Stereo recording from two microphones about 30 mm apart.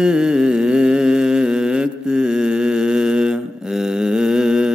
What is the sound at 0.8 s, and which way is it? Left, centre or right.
Mantra, right.